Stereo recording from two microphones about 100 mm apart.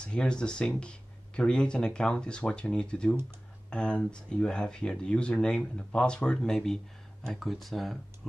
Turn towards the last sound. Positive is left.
turn(degrees=0)  # may be behind; listen again after turning